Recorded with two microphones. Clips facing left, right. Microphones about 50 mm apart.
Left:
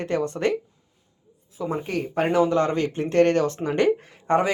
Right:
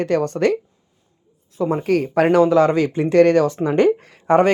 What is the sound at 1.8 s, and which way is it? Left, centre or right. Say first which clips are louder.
Speech: right 8 dB; right.